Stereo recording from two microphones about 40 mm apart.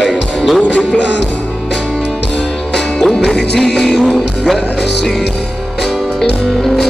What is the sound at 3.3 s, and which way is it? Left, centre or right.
Music, centre.